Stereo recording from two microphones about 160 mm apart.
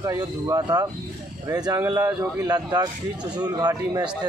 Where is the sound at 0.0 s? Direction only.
20° right (ahead or behind).